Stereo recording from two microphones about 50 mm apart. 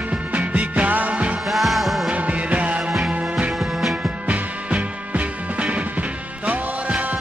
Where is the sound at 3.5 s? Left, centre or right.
Centre.